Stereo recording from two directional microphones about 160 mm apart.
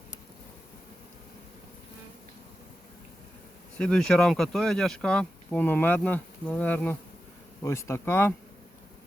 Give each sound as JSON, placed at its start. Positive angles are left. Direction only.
{"t": 3.8, "sound": "speech", "side_deg": 5}